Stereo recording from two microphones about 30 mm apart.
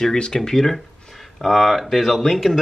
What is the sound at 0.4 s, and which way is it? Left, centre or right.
Speech, centre.